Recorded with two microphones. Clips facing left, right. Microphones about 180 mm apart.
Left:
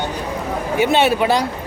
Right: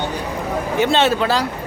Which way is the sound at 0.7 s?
10° left (ahead or behind).